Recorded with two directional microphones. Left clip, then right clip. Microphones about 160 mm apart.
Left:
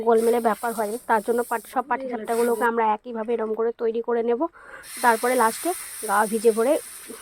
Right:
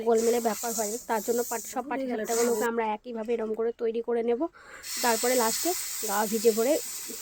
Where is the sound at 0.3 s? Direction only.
5° left (ahead or behind).